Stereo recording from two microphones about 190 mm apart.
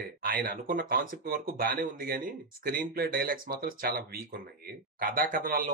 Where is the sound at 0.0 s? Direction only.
50° right (ahead or behind).